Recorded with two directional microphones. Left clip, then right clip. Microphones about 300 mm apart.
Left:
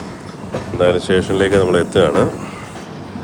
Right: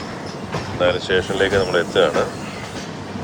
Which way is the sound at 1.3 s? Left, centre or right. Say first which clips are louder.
Left 4 dB; left.